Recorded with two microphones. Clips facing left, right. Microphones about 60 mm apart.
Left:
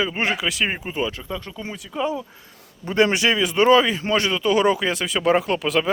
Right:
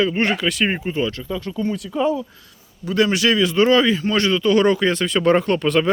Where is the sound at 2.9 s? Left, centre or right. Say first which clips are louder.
Right 1 dB; left.